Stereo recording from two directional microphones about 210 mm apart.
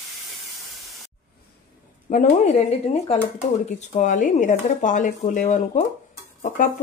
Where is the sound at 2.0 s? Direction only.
35° left (ahead or behind).